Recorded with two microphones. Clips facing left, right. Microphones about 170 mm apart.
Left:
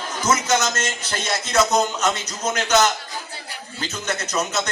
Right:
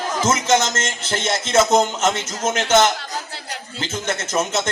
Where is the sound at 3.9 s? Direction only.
25° right (ahead or behind).